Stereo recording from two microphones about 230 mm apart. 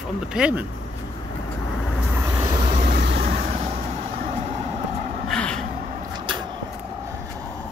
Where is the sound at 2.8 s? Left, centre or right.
Right.